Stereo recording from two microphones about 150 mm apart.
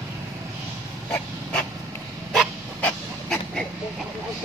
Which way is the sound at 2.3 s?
5° left (ahead or behind).